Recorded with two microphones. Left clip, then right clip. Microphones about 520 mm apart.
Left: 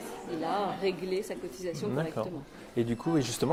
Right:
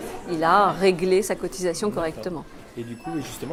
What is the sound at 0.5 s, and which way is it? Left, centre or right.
A woman's voice, right.